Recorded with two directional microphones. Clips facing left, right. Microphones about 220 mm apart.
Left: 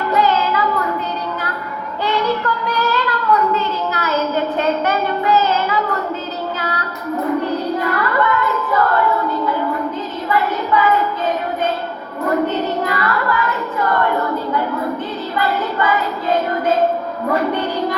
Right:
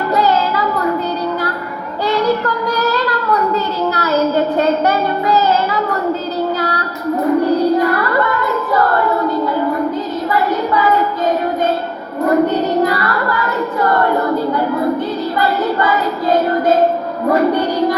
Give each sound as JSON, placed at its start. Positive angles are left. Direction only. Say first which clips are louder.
{"t": 0.1, "sound": "a sound", "louder": "right 1 dB", "side_deg": -35}
{"t": 2.0, "sound": "child singing", "louder": "right 4 dB", "side_deg": -35}
{"t": 7.4, "sound": "singing", "louder": "right 7 dB", "side_deg": -35}
{"t": 10.2, "sound": "child singing", "louder": "right 1 dB", "side_deg": -40}
{"t": 12.5, "sound": "singing", "louder": "right 5 dB", "side_deg": -35}
{"t": 15.4, "sound": "child singing", "louder": "right 2 dB", "side_deg": -40}
{"t": 17.2, "sound": "music", "louder": "right 5 dB", "side_deg": -35}